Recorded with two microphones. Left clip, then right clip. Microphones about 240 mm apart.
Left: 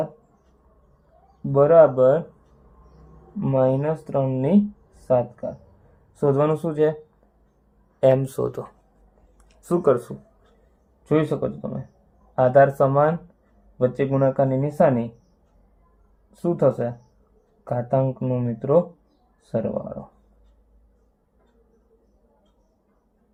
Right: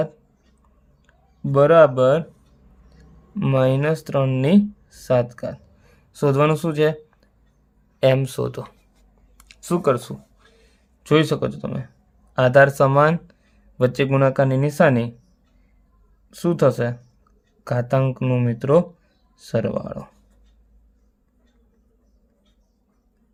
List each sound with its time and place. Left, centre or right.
1.5 s speech: right
3.4 s speech: right
7.9 s speech: right
11.1 s speech: right
16.3 s speech: right